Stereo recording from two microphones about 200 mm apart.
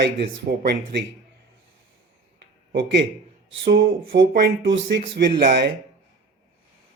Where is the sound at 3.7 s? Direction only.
55° right (ahead or behind).